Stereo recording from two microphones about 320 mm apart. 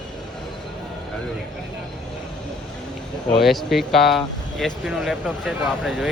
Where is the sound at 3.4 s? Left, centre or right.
Centre.